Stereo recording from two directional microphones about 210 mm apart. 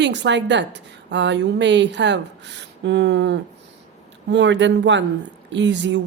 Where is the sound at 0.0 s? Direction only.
55° right (ahead or behind).